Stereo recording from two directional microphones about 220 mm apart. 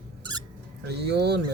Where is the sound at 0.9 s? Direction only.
50° right (ahead or behind).